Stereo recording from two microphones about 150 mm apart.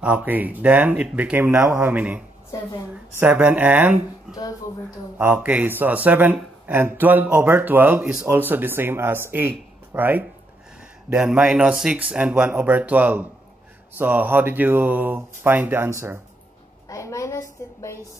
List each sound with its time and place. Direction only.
0.0 s speech: 10° right (ahead or behind)
2.5 s a woman's voice: 25° left (ahead or behind)
2.9 s speech: 10° right (ahead or behind)
16.9 s a woman's voice: 20° left (ahead or behind)